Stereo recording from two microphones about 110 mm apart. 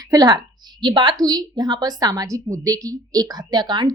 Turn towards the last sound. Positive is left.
turn(degrees=-40)  # may be behind; listen again after turning